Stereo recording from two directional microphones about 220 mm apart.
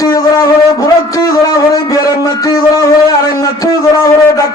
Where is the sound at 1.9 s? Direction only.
15° left (ahead or behind).